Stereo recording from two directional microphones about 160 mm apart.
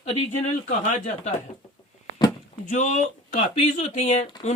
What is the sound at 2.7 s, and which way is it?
Speech, 50° left (ahead or behind).